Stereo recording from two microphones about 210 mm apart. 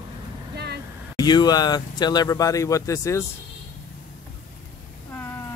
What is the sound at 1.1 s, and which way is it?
Speech, 20° left (ahead or behind).